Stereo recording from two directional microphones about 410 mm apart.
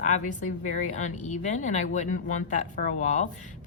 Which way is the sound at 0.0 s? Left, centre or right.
Centre.